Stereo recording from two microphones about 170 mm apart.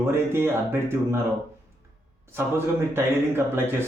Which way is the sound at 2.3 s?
15° right (ahead or behind).